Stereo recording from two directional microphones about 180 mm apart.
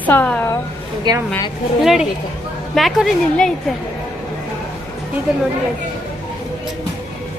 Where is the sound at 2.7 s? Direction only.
Centre (ahead or behind).